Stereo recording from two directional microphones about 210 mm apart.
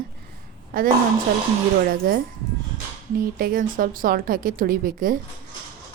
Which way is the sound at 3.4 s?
40° right (ahead or behind).